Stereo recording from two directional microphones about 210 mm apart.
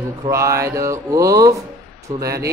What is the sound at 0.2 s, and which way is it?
A man's voice, 15° right (ahead or behind).